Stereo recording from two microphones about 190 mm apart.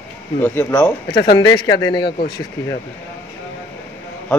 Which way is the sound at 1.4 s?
20° left (ahead or behind).